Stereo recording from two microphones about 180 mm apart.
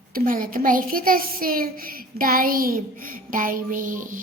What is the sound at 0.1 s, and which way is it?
A child's voice, 50° right (ahead or behind).